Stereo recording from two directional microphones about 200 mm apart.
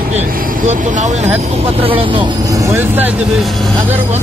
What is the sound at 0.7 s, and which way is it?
Speech, 40° right (ahead or behind).